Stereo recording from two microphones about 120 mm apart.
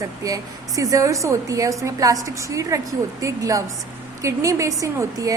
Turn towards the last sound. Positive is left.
turn(degrees=-30)  # may be behind; listen again after turning